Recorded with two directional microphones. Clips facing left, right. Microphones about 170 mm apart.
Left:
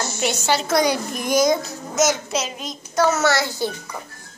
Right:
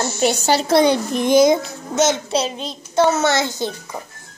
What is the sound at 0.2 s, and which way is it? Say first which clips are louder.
A child's voice: right 4 dB; 35° right (ahead or behind).